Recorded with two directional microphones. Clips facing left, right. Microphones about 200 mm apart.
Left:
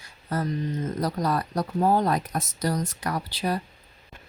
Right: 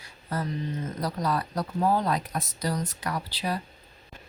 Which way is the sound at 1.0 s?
45° left (ahead or behind).